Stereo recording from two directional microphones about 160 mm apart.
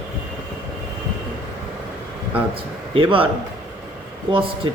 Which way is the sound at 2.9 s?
35° right (ahead or behind).